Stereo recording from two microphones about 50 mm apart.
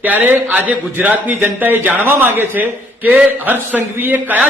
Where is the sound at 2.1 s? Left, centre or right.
Right.